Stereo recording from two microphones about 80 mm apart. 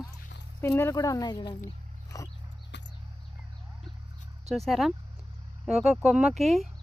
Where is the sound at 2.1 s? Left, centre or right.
Left.